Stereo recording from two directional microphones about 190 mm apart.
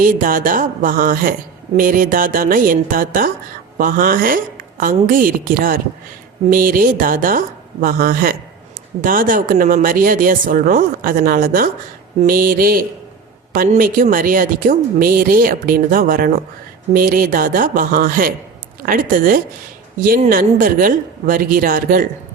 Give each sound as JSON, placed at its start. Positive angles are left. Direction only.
{"t": 0.0, "sound": "a woman's voice", "side_deg": -45}